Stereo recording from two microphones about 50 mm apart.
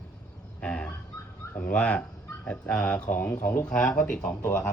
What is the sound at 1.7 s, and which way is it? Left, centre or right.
Speech, left.